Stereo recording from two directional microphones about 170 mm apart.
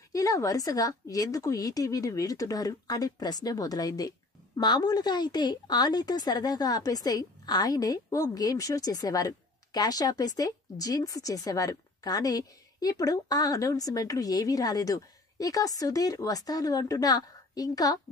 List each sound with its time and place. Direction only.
0.1 s a woman's voice: 20° left (ahead or behind)